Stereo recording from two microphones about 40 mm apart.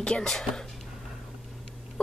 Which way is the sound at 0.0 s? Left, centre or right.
Left.